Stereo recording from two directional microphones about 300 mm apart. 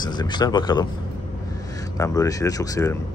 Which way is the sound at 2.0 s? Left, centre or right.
Centre.